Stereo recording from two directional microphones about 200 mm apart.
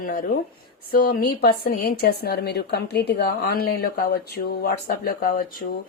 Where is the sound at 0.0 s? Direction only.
45° left (ahead or behind).